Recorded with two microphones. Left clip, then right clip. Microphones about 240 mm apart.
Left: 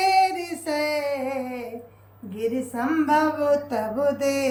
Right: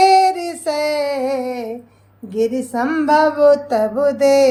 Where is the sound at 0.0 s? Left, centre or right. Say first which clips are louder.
Right 8 dB; centre.